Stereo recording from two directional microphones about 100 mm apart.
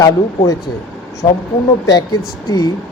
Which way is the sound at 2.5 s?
40° left (ahead or behind).